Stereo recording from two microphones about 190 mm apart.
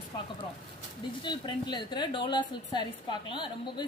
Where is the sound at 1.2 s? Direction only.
25° left (ahead or behind).